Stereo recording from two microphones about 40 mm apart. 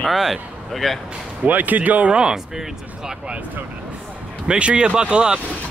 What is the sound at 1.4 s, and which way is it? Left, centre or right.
Speech, right.